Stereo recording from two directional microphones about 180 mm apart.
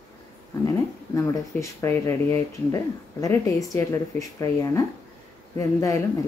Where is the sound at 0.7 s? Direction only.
15° left (ahead or behind).